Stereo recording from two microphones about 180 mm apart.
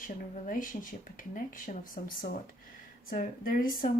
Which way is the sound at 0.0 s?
50° left (ahead or behind).